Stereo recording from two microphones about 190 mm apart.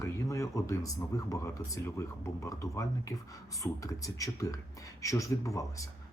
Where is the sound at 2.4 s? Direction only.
15° left (ahead or behind).